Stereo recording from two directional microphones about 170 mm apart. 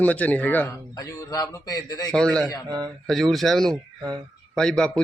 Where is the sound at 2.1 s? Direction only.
5° left (ahead or behind).